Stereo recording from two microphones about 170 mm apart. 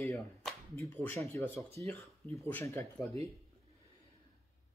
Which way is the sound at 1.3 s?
15° left (ahead or behind).